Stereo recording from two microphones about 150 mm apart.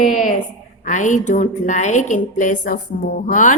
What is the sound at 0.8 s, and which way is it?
A woman's voice, 55° left (ahead or behind).